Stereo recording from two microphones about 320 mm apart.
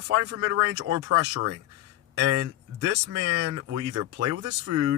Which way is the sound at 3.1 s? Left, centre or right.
Right.